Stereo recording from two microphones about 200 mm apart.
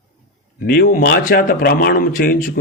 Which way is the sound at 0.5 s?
45° left (ahead or behind).